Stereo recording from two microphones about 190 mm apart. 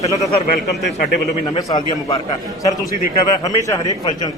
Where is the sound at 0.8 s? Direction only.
60° left (ahead or behind).